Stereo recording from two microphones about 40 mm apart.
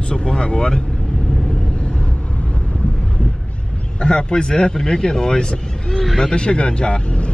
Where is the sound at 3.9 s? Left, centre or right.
Left.